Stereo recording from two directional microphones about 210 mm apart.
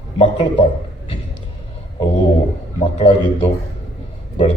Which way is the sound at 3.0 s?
30° left (ahead or behind).